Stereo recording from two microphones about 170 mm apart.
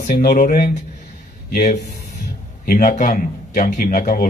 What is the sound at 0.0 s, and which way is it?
Speech, 60° left (ahead or behind).